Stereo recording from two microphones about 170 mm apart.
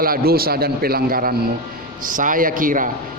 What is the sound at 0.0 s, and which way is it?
A man's voice, 60° right (ahead or behind).